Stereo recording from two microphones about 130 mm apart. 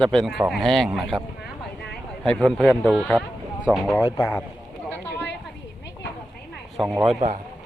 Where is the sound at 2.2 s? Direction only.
5° left (ahead or behind).